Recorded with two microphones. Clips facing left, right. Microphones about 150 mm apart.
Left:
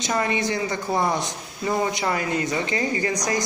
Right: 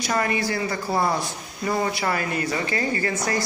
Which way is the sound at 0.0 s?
20° left (ahead or behind).